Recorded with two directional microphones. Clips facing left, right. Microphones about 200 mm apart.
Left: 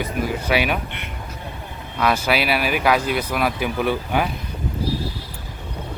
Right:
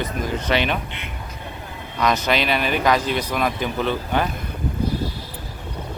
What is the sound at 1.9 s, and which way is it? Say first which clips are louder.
Speech: even; 5° left (ahead or behind).